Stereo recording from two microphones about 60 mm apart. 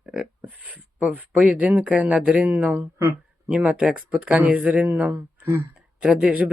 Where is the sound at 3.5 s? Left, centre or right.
Centre.